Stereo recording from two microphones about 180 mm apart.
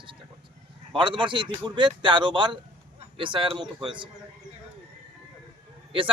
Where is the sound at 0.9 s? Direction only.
25° right (ahead or behind).